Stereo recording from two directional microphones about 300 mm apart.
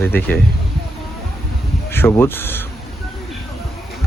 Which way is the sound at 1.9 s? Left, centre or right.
Centre.